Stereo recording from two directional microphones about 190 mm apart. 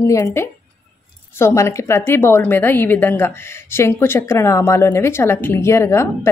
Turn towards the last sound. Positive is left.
turn(degrees=15)  # may be behind; listen again after turning